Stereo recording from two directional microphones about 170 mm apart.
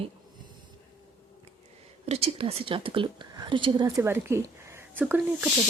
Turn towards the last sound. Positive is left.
turn(degrees=-10)  # may be behind; listen again after turning